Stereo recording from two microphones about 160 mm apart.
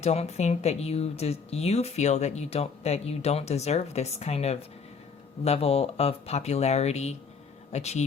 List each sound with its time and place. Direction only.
0.0 s speech: 40° left (ahead or behind)